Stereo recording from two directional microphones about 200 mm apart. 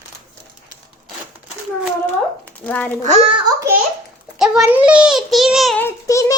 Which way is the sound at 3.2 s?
25° right (ahead or behind).